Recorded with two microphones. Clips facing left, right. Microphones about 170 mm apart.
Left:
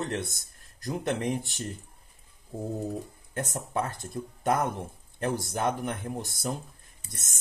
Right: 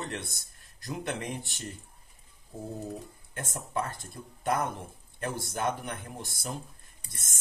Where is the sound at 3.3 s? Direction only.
45° left (ahead or behind).